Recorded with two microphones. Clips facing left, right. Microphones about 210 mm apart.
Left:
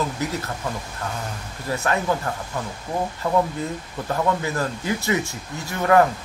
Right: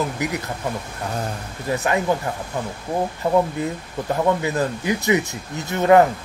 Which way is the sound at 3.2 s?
15° right (ahead or behind).